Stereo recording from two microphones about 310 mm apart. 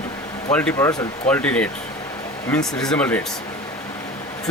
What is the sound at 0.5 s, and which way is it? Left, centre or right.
Speech, centre.